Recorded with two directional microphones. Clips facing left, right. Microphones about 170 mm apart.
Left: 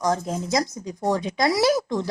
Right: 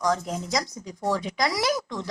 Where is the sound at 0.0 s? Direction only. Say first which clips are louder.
Left 2 dB; 25° left (ahead or behind).